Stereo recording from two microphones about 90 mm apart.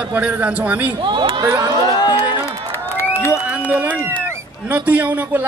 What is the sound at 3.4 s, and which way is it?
A man's voice, 15° right (ahead or behind).